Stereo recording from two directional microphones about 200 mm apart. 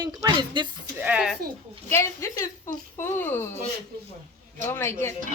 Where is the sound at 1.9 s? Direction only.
15° left (ahead or behind).